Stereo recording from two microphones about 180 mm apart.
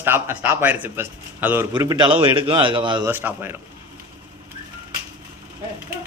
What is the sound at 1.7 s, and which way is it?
Speech, 20° right (ahead or behind).